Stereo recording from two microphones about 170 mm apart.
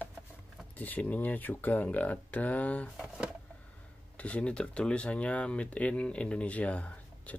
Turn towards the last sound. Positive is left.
turn(degrees=10)  # may be behind; listen again after turning